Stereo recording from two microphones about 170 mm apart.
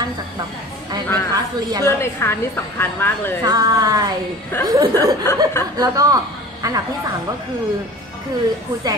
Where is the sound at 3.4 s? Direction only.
20° right (ahead or behind).